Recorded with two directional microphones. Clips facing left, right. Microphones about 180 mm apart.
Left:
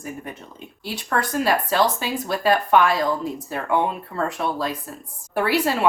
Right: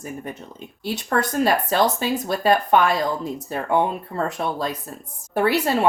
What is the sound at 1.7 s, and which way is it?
Speech, 50° right (ahead or behind).